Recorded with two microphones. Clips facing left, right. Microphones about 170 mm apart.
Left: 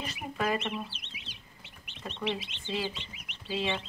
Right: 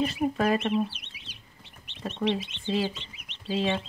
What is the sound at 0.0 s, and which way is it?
Speech, 35° right (ahead or behind).